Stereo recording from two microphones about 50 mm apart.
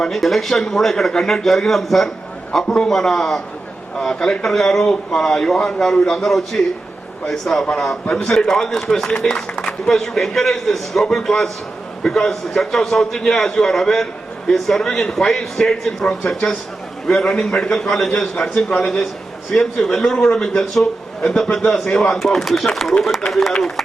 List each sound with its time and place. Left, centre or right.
0.1 s a man's voice: centre
2.6 s a man's voice: centre